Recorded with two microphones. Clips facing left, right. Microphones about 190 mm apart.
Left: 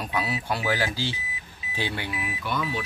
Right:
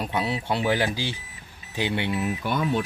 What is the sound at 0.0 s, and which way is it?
Speech, 25° right (ahead or behind).